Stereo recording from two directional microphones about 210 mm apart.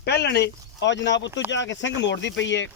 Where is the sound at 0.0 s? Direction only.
50° left (ahead or behind).